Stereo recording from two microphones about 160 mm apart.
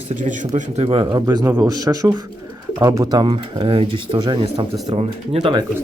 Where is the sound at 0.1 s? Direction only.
50° right (ahead or behind); by 5.6 s 30° right (ahead or behind).